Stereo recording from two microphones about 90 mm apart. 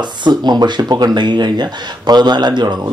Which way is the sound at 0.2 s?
55° right (ahead or behind).